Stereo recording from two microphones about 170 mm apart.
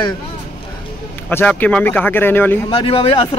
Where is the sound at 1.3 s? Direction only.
10° left (ahead or behind).